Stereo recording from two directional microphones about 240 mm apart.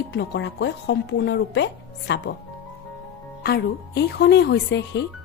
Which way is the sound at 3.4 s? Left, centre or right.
Left.